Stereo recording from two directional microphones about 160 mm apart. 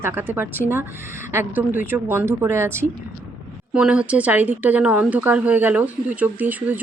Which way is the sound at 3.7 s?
5° right (ahead or behind).